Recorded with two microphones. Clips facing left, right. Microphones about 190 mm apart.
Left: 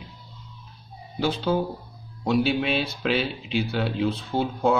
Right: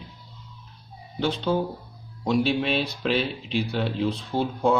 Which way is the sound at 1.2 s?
5° left (ahead or behind).